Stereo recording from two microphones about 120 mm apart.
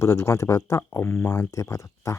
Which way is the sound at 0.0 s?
25° left (ahead or behind).